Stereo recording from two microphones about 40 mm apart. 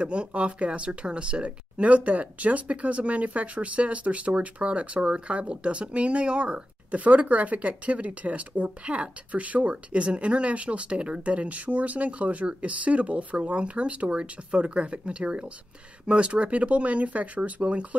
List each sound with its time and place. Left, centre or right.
0.0 s speech: right